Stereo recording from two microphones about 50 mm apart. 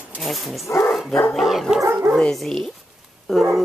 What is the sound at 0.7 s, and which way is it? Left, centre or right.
Speech, left.